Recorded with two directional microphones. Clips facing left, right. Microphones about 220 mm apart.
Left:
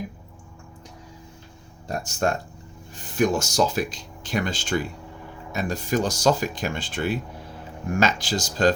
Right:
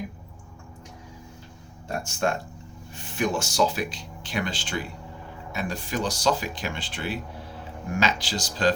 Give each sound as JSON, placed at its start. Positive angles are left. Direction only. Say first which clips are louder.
{"t": 1.9, "sound": "speech", "louder": "left 2 dB", "side_deg": 40}